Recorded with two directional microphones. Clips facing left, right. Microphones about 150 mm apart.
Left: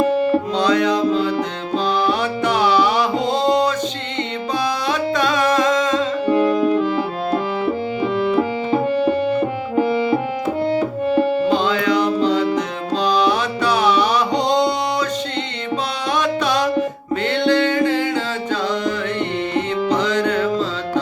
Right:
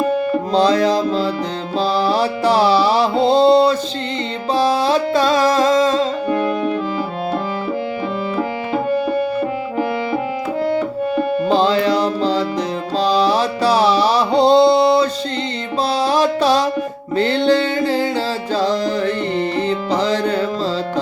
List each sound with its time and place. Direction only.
0.5 s music: 35° right (ahead or behind)
11.4 s music: 35° right (ahead or behind)
16.0 s music: 30° right (ahead or behind)